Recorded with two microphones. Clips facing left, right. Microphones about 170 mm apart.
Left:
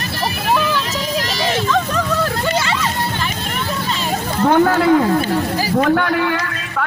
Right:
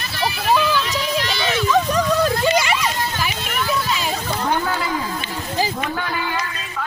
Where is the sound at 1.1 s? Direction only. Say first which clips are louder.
Left 4 dB; 40° left (ahead or behind).